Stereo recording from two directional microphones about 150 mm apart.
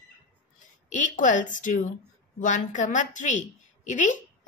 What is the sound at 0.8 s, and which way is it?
Speech, 55° left (ahead or behind).